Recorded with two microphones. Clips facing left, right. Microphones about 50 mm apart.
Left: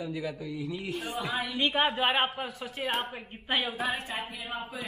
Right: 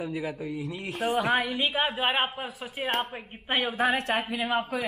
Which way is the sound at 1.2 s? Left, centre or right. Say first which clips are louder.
Right 6 dB; right.